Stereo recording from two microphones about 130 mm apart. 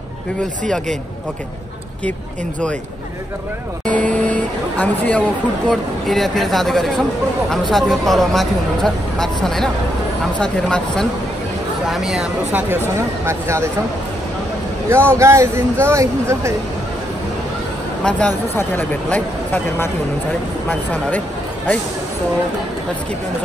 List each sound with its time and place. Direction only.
3.8 s speech: 10° left (ahead or behind); by 12.7 s 10° right (ahead or behind)
13.2 s speech: 20° right (ahead or behind)
14.9 s speech: 20° right (ahead or behind)
18.0 s speech: 5° left (ahead or behind)